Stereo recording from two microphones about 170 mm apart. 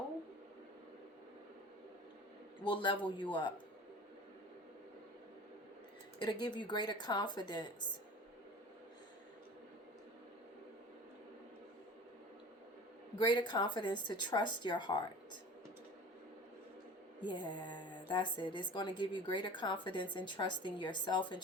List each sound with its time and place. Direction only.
2.6 s a woman's voice: 30° left (ahead or behind)
6.1 s a woman's voice: 25° left (ahead or behind)
13.1 s a woman's voice: 25° left (ahead or behind)
17.2 s a woman's voice: 25° left (ahead or behind)